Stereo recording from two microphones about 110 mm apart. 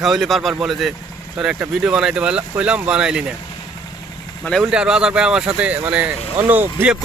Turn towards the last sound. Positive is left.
turn(degrees=-15)  # may be behind; listen again after turning